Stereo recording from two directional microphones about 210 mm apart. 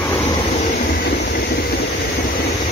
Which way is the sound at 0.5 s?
40° left (ahead or behind).